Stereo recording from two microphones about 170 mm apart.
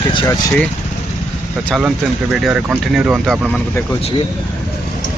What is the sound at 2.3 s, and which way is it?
Speech, 5° right (ahead or behind).